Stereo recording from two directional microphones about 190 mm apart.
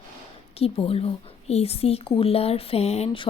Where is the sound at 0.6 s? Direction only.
30° left (ahead or behind).